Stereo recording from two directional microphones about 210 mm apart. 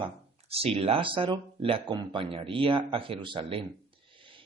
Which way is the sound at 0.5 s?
30° right (ahead or behind).